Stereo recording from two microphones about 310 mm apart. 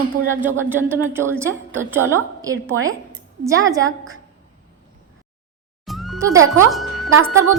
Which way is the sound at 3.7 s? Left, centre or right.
Centre.